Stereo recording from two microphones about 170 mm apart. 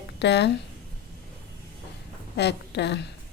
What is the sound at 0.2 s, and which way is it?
Speech, 85° left.